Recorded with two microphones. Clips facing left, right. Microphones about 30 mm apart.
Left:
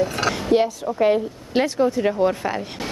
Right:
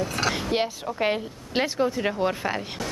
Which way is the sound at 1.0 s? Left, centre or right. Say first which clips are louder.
Left 7 dB; centre.